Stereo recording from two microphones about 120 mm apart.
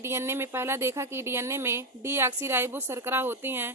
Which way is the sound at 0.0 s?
20° right (ahead or behind).